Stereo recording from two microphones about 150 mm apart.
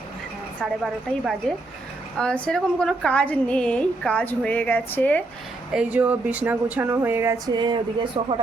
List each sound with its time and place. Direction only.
0.6 s a woman's voice: 5° right (ahead or behind)
5.7 s speech: 10° right (ahead or behind)
7.4 s speech: 30° right (ahead or behind)